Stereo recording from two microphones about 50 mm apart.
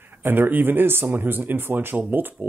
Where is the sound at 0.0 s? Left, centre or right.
Right.